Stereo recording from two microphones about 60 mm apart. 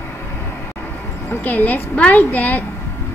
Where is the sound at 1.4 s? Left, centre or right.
Left.